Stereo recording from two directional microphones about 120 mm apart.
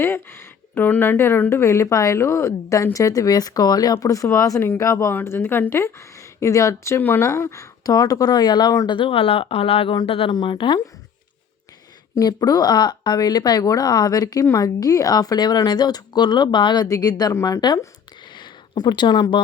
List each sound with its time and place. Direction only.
0.0 s speech: 20° left (ahead or behind); by 10.8 s 45° left (ahead or behind)
12.1 s a woman's voice: 30° left (ahead or behind)
18.3 s a sound: 40° left (ahead or behind)